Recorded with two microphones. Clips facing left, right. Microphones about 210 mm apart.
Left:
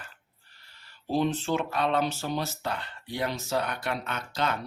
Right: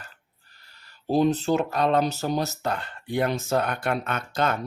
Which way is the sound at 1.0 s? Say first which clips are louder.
Right 5 dB; 40° right (ahead or behind).